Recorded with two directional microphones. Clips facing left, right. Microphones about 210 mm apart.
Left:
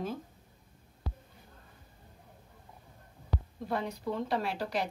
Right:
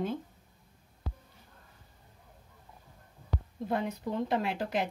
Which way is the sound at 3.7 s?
20° right (ahead or behind).